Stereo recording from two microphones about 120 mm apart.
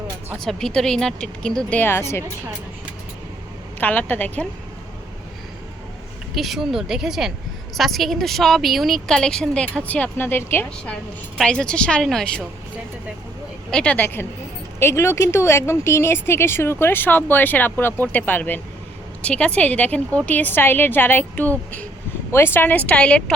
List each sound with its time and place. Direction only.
0.3 s a woman's voice: 5° left (ahead or behind)
1.8 s speech: 20° left (ahead or behind)
3.8 s speech: 15° left (ahead or behind)
6.3 s a woman's voice: centre (ahead or behind); by 10.9 s 20° left (ahead or behind)
11.3 s speech: 10° left (ahead or behind)
13.7 s speech: 10° left (ahead or behind)